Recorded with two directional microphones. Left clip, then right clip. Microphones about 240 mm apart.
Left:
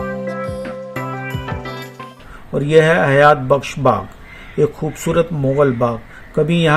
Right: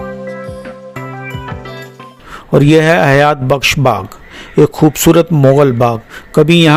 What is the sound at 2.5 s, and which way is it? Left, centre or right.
A man's voice, right.